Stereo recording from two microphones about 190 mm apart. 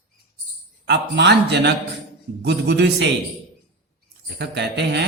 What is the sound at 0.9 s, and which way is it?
A man's voice, 65° right (ahead or behind).